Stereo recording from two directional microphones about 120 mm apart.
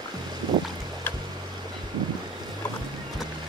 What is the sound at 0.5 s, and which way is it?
Boat, 40° right (ahead or behind).